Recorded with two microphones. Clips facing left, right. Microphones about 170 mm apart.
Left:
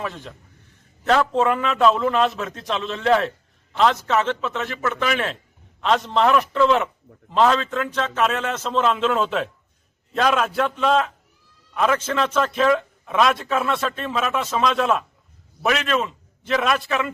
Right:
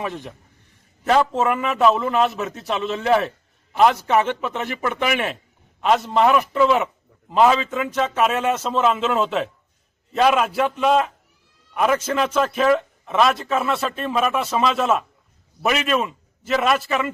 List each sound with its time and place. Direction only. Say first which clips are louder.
0.0 s a man's voice: right 2 dB; 15° right (ahead or behind)